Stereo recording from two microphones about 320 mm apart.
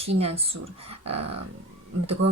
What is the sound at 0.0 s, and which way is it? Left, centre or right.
Speech, centre.